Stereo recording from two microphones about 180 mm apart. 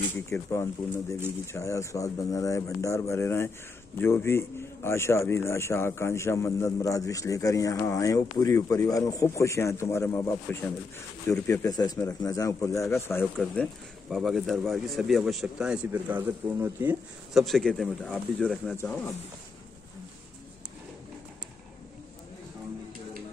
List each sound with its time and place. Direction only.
0.1 s a man's voice: 15° left (ahead or behind)
13.4 s speech: centre (ahead or behind)
17.3 s a man's voice: centre (ahead or behind)